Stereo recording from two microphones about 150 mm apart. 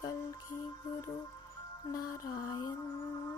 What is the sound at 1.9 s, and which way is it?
Mantra, 25° left (ahead or behind).